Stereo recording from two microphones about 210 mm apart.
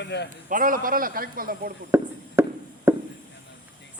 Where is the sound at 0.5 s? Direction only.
40° right (ahead or behind).